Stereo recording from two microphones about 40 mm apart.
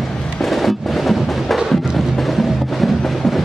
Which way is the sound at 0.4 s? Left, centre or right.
Centre.